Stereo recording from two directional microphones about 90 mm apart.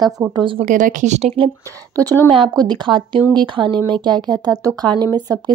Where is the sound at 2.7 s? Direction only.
60° right (ahead or behind).